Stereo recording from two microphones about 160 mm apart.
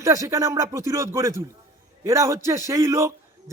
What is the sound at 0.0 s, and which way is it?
Speech, 20° right (ahead or behind).